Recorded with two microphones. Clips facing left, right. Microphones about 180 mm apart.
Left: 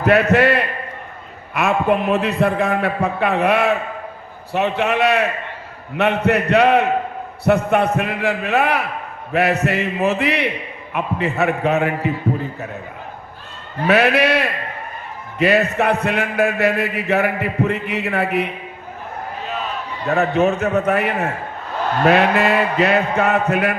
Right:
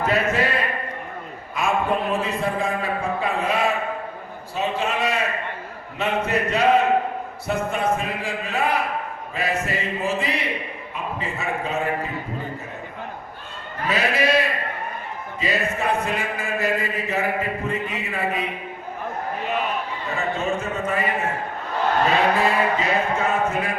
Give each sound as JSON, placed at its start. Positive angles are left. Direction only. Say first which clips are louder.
{"t": 0.0, "sound": "a sound", "louder": "left 7 dB", "side_deg": 65}
{"t": 1.5, "sound": "a man's voice", "louder": "left 5 dB", "side_deg": 65}
{"t": 13.8, "sound": "a man's voice", "louder": "left 7 dB", "side_deg": 65}
{"t": 20.1, "sound": "a man's voice", "louder": "left 10 dB", "side_deg": 70}